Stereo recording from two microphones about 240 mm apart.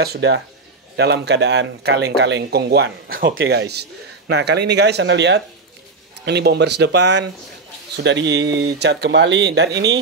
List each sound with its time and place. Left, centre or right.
0.0 s speech: right